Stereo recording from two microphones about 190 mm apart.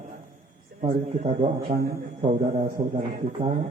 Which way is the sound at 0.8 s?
40° right (ahead or behind).